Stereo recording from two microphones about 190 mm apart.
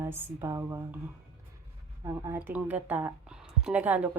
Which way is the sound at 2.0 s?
15° right (ahead or behind).